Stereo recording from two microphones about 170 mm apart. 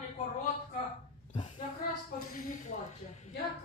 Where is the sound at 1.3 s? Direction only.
45° left (ahead or behind).